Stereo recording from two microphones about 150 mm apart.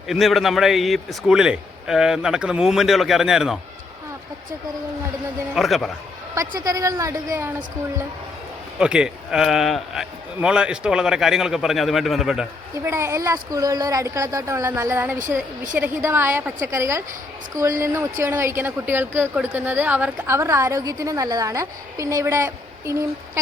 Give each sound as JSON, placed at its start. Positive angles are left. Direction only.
{"t": 0.1, "sound": "a man's voice", "side_deg": 0}
{"t": 5.5, "sound": "a man's voice", "side_deg": 0}
{"t": 6.3, "sound": "speech", "side_deg": -25}
{"t": 8.8, "sound": "a man's voice", "side_deg": -5}
{"t": 12.7, "sound": "a woman's voice", "side_deg": -20}